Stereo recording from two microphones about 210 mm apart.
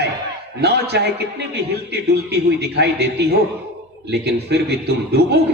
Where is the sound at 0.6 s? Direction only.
50° right (ahead or behind).